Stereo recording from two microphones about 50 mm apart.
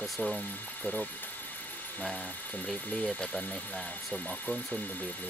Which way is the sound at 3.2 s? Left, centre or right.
Centre.